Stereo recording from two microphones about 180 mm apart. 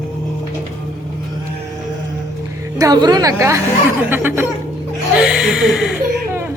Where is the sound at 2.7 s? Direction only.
20° right (ahead or behind).